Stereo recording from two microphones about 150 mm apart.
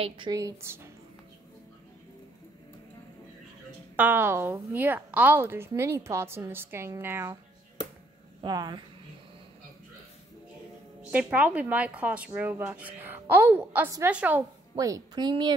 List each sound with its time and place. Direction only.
0.3 s a woman's voice: 20° right (ahead or behind)
3.9 s a woman's voice: 10° right (ahead or behind)
8.4 s speech: 30° right (ahead or behind)
11.0 s a woman's voice: 10° right (ahead or behind)
14.8 s a woman's voice: 25° right (ahead or behind)